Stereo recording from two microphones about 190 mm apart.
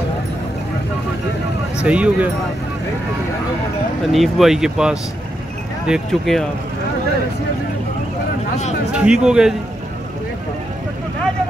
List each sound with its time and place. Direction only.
1.8 s speech: 5° right (ahead or behind)
4.1 s speech: centre (ahead or behind)
8.9 s speech: 5° right (ahead or behind)